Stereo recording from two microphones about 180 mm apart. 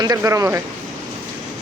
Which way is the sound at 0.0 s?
20° right (ahead or behind).